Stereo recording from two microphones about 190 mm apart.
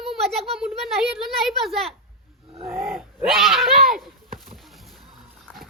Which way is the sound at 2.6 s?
10° right (ahead or behind).